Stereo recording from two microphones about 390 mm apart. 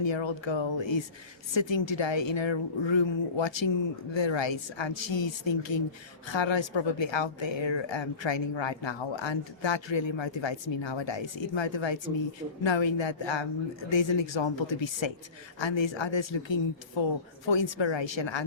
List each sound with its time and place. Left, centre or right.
0.0 s speech: left